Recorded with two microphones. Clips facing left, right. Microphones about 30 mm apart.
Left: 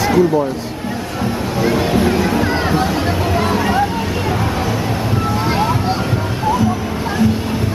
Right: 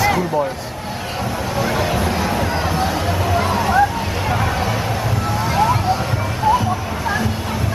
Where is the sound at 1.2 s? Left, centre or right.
Centre.